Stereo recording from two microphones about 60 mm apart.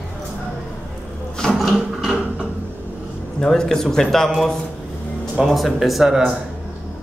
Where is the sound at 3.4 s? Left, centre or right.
Centre.